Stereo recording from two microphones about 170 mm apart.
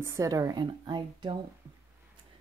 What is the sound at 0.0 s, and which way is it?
Speech, 20° right (ahead or behind).